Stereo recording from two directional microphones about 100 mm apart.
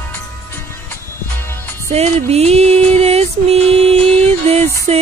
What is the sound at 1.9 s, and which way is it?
Music, 90° right.